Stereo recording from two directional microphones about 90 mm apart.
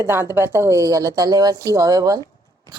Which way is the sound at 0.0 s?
25° right (ahead or behind).